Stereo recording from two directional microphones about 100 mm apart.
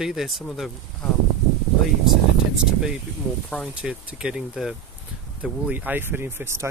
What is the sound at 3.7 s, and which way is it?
Speech, 10° right (ahead or behind).